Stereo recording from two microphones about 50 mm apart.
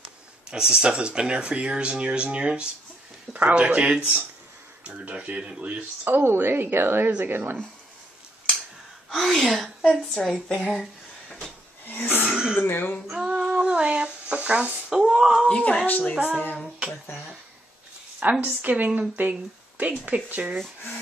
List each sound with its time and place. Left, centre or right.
0.5 s speech: centre
6.0 s a woman's voice: right
9.1 s speech: centre
10.5 s speech: centre
11.8 s roaring cats: left
12.3 s throat clearing: centre
12.5 s speech: left
13.1 s female singing: centre
13.4 s a sound: centre; by 14.7 s right
14.9 s speech: centre
15.4 s a woman's voice: left
18.4 s a woman's voice: right